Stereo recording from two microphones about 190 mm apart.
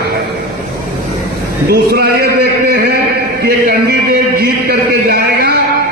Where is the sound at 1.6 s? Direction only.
55° right (ahead or behind).